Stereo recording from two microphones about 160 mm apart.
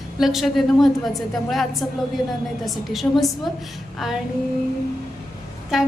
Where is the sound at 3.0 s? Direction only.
15° left (ahead or behind).